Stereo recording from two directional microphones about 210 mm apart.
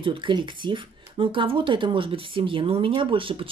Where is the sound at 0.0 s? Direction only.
25° right (ahead or behind).